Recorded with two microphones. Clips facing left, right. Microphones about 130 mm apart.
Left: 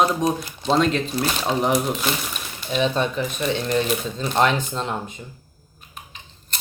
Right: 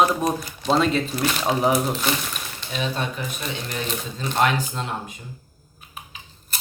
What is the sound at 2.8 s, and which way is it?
Speech, 25° left (ahead or behind).